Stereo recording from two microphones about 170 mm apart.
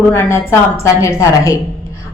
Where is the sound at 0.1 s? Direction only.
15° left (ahead or behind).